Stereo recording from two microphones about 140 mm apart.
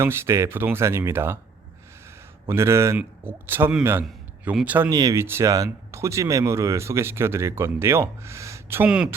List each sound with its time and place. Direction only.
0.0 s speech: 20° right (ahead or behind)
2.5 s speech: 20° right (ahead or behind)
4.9 s speech: 25° right (ahead or behind)
8.9 s speech: 5° right (ahead or behind)